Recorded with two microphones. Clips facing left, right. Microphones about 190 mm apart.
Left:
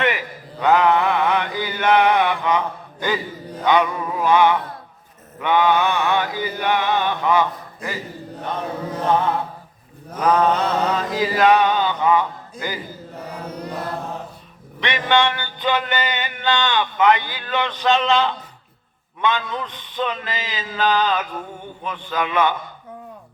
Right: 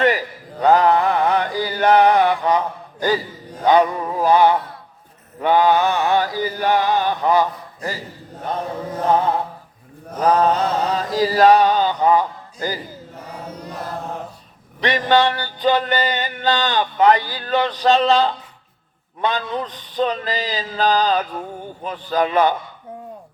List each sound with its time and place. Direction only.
0.0 s chant: 35° right (ahead or behind)
5.4 s music: 35° right (ahead or behind)
10.2 s mantra: 35° right (ahead or behind)
14.8 s music: 35° right (ahead or behind)